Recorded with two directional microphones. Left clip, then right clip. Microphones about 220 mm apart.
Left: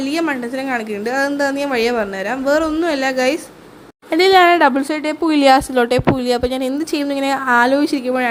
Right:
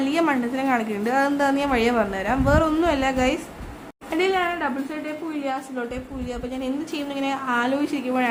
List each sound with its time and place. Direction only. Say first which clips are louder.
0.0 s a woman's voice: left 2 dB; 10° left (ahead or behind)
4.1 s speech: left 11 dB; 30° left (ahead or behind)
4.4 s speech: left 13 dB; 50° left (ahead or behind); by 8.3 s 25° left (ahead or behind)